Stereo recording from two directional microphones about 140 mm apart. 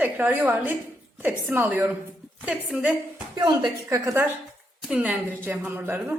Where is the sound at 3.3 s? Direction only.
30° right (ahead or behind).